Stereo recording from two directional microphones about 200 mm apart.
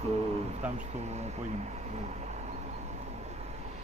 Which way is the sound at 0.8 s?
35° right (ahead or behind).